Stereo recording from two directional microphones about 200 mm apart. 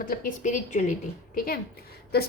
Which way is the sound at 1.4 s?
50° left (ahead or behind).